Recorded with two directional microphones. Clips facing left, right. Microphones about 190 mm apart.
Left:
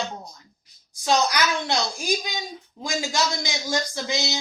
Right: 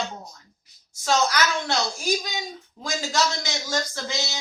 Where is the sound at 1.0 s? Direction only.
15° left (ahead or behind).